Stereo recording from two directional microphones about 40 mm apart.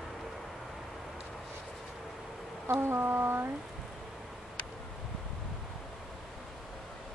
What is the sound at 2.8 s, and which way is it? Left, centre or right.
Mantra, right.